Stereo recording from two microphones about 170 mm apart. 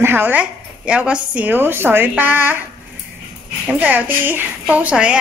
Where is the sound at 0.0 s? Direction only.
10° right (ahead or behind).